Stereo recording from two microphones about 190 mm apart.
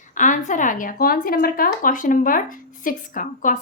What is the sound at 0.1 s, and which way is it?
Speech, 40° left (ahead or behind).